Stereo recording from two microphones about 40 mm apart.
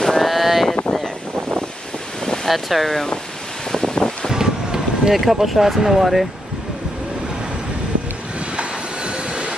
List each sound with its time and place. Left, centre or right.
0.0 s a sound: centre
2.4 s speech: centre
3.7 s wind noise: centre
4.3 s vehicle: centre
5.1 s speech: centre
8.5 s train: right